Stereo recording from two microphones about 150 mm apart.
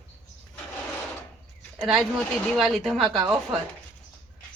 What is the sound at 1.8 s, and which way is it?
Speech, 5° right (ahead or behind).